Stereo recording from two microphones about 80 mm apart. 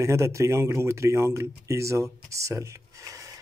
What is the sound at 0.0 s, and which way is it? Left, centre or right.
Speech, right.